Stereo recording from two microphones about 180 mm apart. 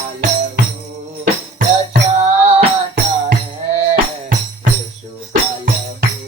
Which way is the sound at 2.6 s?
55° right (ahead or behind).